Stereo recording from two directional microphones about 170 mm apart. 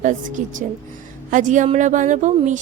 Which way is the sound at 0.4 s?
50° right (ahead or behind).